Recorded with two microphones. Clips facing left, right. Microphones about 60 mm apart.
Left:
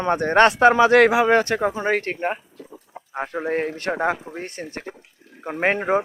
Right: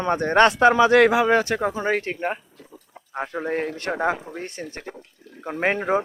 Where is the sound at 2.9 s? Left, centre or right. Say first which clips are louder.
Left 9 dB; centre.